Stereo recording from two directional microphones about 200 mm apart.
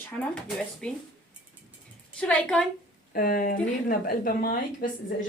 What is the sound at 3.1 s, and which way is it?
A woman's voice, 45° left (ahead or behind).